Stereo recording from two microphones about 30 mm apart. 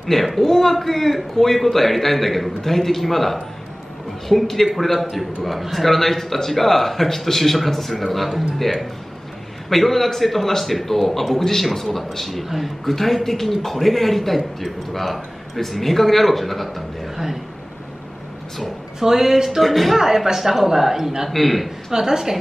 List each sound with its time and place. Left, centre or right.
0.0 s a man's voice: centre
5.9 s a man's voice: centre
12.8 s a man's voice: centre
18.9 s speech: centre
19.6 s a man's voice: centre
20.0 s speech: centre
21.3 s a man's voice: centre
21.9 s speech: centre